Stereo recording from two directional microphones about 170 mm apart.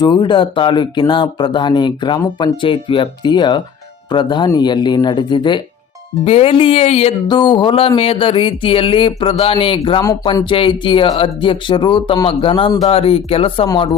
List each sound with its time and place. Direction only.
0.0 s speech: 25° left (ahead or behind)
6.2 s music: 35° left (ahead or behind)
10.3 s speech: 30° left (ahead or behind)
12.8 s music: 35° left (ahead or behind)